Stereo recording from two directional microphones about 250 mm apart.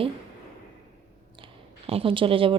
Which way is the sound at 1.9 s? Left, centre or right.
Right.